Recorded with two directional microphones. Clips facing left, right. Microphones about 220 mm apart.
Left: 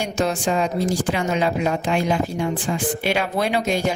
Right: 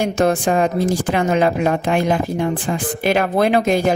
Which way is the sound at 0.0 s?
55° right (ahead or behind).